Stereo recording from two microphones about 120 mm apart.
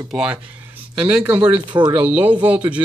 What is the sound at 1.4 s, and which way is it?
Speech, 40° right (ahead or behind).